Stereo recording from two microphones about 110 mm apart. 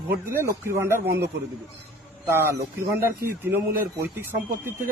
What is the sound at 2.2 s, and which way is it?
Speech, 25° right (ahead or behind).